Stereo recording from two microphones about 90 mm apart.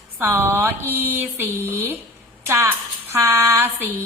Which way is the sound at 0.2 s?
30° right (ahead or behind).